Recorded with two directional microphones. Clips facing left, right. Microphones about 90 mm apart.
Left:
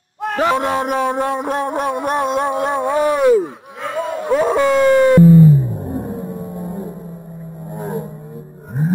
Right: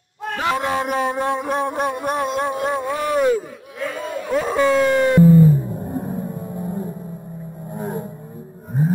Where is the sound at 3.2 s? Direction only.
70° left (ahead or behind).